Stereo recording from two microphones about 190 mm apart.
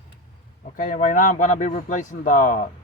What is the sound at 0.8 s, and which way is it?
Speech, 40° left (ahead or behind).